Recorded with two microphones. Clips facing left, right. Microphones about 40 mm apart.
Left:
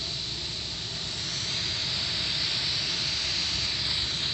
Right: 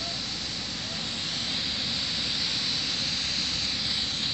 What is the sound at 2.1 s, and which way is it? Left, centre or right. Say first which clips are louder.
Pink noise: even; centre.